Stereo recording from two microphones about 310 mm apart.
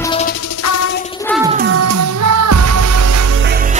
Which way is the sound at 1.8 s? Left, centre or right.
Right.